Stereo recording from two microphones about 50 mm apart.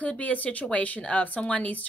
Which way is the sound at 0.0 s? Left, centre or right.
Left.